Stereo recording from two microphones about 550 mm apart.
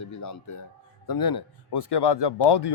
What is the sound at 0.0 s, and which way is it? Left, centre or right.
A man's voice, left.